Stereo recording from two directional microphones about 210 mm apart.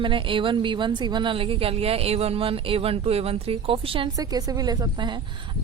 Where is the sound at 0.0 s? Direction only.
25° right (ahead or behind).